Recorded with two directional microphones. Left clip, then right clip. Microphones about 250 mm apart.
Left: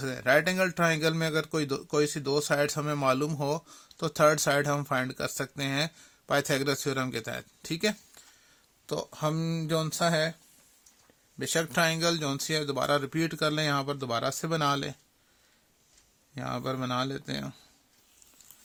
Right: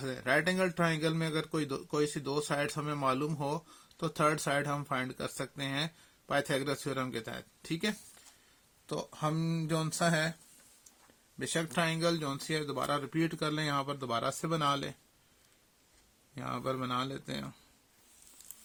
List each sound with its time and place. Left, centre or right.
0.0 s a man's voice: left
11.3 s a man's voice: left
16.3 s a man's voice: left